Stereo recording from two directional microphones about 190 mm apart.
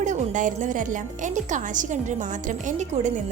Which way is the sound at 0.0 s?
40° right (ahead or behind).